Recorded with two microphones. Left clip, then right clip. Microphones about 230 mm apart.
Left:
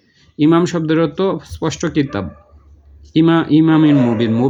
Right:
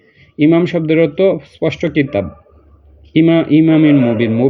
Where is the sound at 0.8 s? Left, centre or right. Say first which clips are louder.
Right 4 dB; centre.